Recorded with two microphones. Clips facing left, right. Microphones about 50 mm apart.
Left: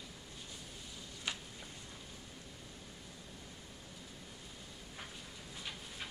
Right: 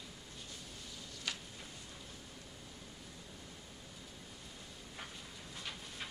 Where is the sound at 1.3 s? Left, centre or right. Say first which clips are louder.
Left 1 dB; left.